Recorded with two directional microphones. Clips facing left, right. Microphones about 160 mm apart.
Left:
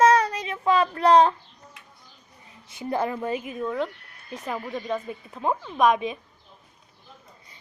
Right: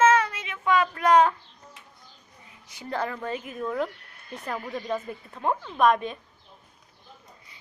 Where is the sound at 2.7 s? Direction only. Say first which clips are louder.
Left 4 dB; 20° left (ahead or behind).